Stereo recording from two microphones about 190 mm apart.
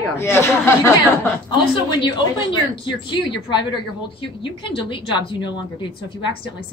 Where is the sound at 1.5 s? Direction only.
25° left (ahead or behind).